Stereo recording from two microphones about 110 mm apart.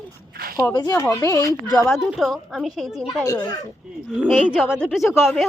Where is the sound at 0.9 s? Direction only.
25° left (ahead or behind).